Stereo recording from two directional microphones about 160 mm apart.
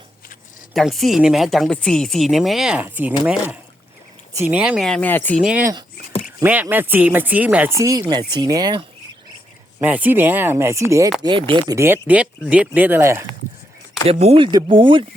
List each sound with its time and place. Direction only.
0.7 s speech: centre (ahead or behind)
4.4 s speech: 10° right (ahead or behind)
4.9 s speech: 10° left (ahead or behind)
6.2 s speech: 10° right (ahead or behind)
9.8 s speech: 10° right (ahead or behind)
11.2 s speech: 30° right (ahead or behind)
12.0 s speech: 5° right (ahead or behind)
14.1 s speech: 40° right (ahead or behind)